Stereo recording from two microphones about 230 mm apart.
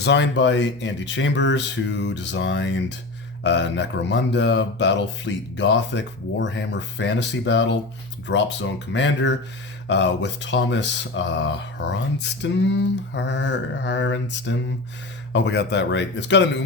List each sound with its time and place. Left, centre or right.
0.0 s speech: left